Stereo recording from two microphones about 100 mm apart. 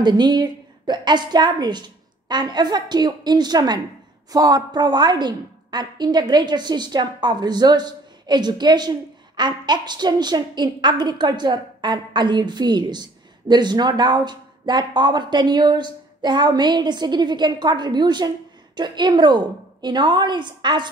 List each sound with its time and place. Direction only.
0.0 s a woman's voice: 45° right (ahead or behind)